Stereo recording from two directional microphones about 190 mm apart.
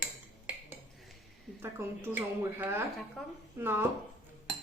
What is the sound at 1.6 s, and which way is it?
A woman's voice, 10° right (ahead or behind).